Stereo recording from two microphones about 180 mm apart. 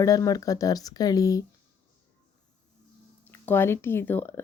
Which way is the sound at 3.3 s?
10° left (ahead or behind).